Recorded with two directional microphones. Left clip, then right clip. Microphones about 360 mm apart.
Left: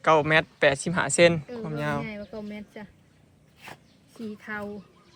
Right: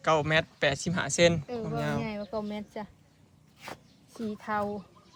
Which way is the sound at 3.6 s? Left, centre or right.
Centre.